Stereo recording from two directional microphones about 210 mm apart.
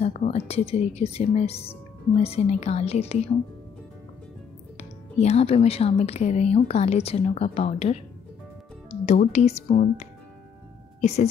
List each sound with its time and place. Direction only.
0.0 s speech: 30° left (ahead or behind)
4.7 s speech: 30° left (ahead or behind)
9.0 s speech: 30° left (ahead or behind)
11.0 s speech: 30° left (ahead or behind)